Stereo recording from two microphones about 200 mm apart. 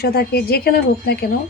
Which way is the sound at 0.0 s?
50° left (ahead or behind).